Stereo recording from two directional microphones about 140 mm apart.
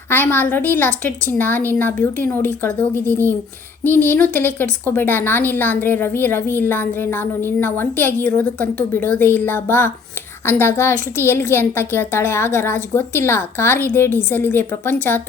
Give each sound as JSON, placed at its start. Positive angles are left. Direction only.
{"t": 0.1, "sound": "a woman's voice", "side_deg": 15}